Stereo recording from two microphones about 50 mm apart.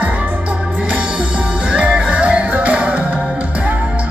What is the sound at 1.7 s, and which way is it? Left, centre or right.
Music, right.